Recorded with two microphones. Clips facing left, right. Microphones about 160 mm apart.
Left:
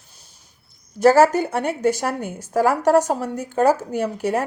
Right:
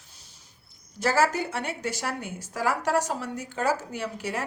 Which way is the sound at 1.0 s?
45° left (ahead or behind).